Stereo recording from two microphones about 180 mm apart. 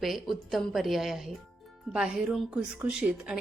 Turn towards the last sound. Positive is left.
turn(degrees=-5)  # may be behind; listen again after turning